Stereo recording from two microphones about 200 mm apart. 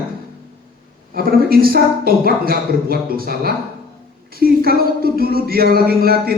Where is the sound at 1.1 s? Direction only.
50° right (ahead or behind).